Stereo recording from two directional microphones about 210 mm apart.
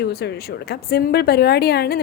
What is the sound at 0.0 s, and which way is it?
A woman's voice, 50° left (ahead or behind).